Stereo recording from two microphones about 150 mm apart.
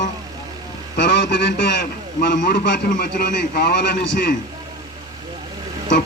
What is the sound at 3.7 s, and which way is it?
Speech, 65° left (ahead or behind).